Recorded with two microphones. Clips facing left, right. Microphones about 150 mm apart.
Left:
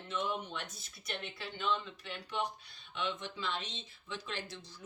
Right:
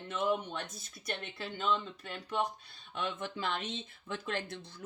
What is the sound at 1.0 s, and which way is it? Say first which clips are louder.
Speech: right 3 dB; 45° right (ahead or behind).